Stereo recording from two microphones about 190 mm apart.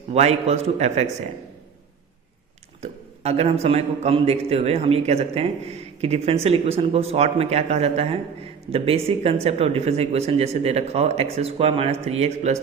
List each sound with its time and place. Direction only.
0.1 s speech: 35° right (ahead or behind)
2.8 s speech: 35° right (ahead or behind)